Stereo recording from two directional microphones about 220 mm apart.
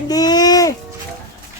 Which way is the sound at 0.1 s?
15° left (ahead or behind).